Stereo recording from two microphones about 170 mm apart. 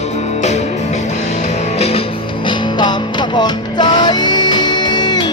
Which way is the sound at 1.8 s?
35° left (ahead or behind).